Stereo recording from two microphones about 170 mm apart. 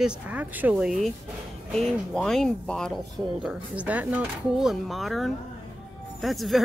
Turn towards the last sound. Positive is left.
turn(degrees=0)  # may be behind; listen again after turning